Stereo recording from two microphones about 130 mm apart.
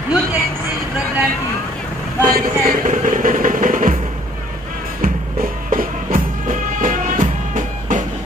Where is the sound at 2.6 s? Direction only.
80° right.